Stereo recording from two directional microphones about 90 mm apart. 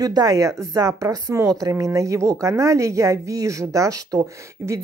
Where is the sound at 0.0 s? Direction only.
45° right (ahead or behind).